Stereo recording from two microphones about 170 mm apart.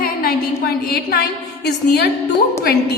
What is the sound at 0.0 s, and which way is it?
A woman's voice, 60° left (ahead or behind).